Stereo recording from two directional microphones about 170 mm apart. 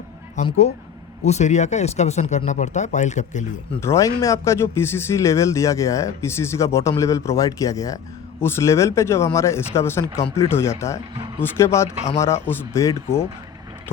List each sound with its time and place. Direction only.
0.4 s speech: 40° left (ahead or behind)
3.8 s speech: 15° left (ahead or behind)